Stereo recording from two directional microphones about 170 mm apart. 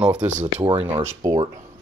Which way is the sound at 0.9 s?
20° right (ahead or behind).